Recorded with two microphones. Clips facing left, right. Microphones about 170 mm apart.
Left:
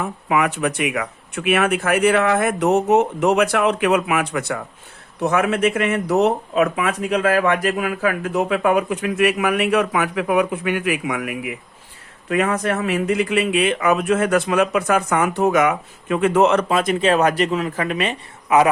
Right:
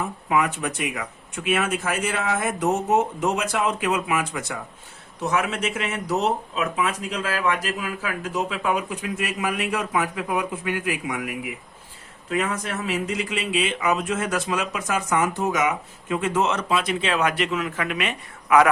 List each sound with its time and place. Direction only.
0.3 s speech: 70° left (ahead or behind); by 18.7 s 25° left (ahead or behind)